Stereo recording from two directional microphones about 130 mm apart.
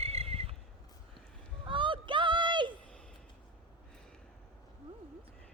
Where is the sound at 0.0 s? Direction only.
50° right (ahead or behind).